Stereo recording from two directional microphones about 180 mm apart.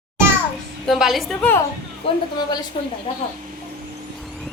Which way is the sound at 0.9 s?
Centre (ahead or behind).